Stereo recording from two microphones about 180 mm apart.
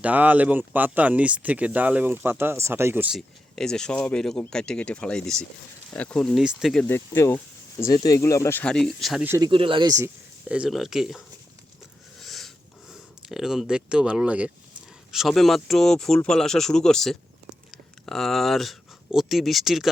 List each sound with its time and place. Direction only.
0.0 s speech: 10° right (ahead or behind)
3.2 s speech: 5° left (ahead or behind)
6.8 s speech: 10° left (ahead or behind)
9.5 s speech: 30° right (ahead or behind)
10.5 s speech: 5° right (ahead or behind)
12.2 s a sound: centre (ahead or behind)
12.9 s speech: centre (ahead or behind)